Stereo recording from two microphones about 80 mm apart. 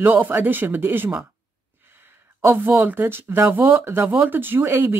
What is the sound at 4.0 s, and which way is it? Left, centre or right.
Speech, centre.